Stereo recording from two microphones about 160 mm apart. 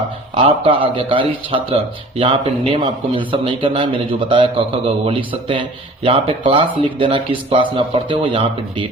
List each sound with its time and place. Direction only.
0.3 s a man's voice: 35° right (ahead or behind)